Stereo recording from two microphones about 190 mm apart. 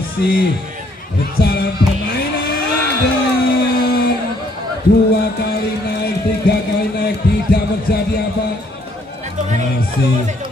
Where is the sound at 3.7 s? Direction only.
55° left (ahead or behind).